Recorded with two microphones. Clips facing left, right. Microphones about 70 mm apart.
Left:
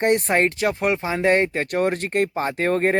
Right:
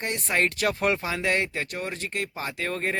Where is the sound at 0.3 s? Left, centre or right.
Left.